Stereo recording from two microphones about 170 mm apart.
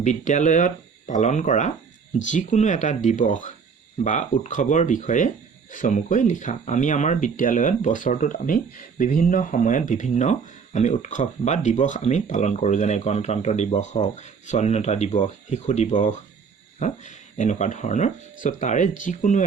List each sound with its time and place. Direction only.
0.0 s speech: 45° left (ahead or behind)